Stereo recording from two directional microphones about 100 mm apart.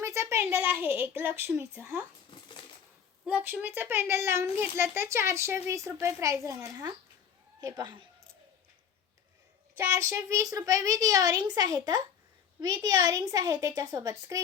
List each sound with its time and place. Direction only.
0.0 s a woman's voice: 30° right (ahead or behind)
3.2 s a child's voice: 15° right (ahead or behind); by 6.8 s 30° right (ahead or behind)
7.6 s speech: 45° right (ahead or behind)
9.7 s a woman's voice: 25° right (ahead or behind)